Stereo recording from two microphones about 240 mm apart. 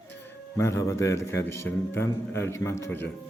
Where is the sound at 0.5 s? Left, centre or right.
Centre.